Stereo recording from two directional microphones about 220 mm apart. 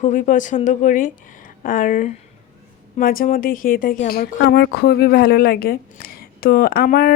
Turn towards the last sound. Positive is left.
turn(degrees=45)  # may be behind; listen again after turning